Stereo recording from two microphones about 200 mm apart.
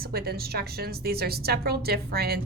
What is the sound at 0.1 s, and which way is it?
A woman's voice, 50° right (ahead or behind).